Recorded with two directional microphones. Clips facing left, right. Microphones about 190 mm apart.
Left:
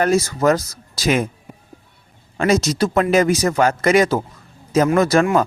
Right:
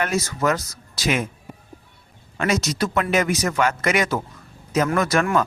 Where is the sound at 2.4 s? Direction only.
30° left (ahead or behind).